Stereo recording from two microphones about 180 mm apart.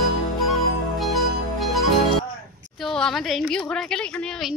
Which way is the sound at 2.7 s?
Centre (ahead or behind).